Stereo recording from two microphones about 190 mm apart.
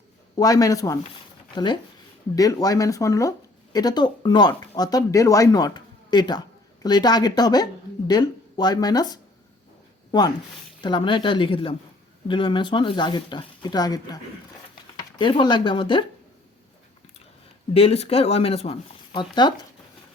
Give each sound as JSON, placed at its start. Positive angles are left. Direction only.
{"t": 0.3, "sound": "a man's voice", "side_deg": 20}
{"t": 15.2, "sound": "speech", "side_deg": 25}
{"t": 17.7, "sound": "speech", "side_deg": 30}